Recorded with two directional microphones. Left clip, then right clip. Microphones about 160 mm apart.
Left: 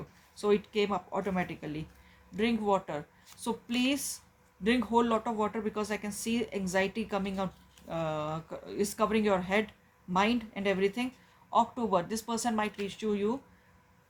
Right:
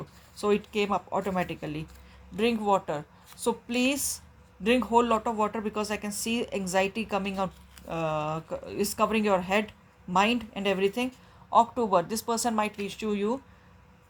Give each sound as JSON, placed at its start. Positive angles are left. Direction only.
{"t": 0.3, "sound": "speech", "side_deg": -45}